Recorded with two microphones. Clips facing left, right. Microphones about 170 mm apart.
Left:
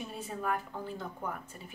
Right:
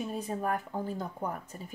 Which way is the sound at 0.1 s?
40° right (ahead or behind).